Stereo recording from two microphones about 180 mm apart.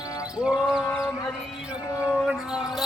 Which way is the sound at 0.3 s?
5° right (ahead or behind).